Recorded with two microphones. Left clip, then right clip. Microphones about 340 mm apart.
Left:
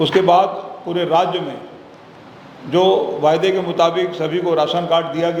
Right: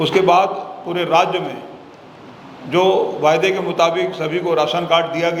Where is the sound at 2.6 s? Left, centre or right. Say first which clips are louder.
Even; right.